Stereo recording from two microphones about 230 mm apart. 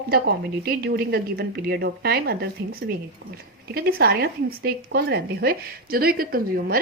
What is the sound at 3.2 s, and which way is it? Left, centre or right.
Speech, right.